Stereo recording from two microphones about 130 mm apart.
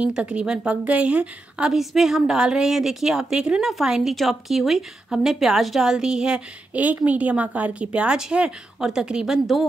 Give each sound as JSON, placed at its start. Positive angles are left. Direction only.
{"t": 0.0, "sound": "a woman's voice", "side_deg": -5}